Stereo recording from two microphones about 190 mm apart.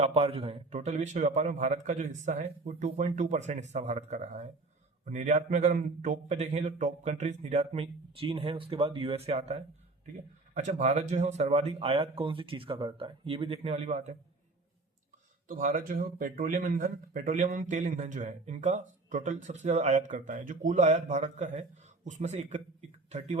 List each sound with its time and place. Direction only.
0.0 s speech: 35° right (ahead or behind)
15.4 s speech: 45° right (ahead or behind)